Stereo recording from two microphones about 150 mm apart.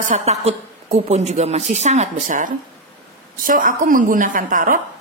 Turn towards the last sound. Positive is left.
turn(degrees=-65)  # may be behind; listen again after turning